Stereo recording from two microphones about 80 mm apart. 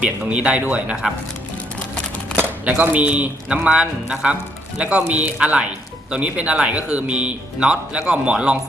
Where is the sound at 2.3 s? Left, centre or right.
Right.